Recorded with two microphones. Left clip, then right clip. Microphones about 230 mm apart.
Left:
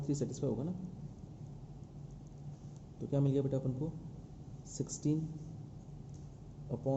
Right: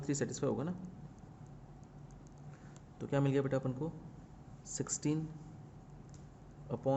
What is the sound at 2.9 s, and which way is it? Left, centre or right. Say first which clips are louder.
Speech: right 1 dB; right.